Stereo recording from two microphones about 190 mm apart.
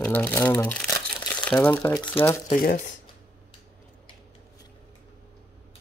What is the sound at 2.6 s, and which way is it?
Speech, 45° left (ahead or behind).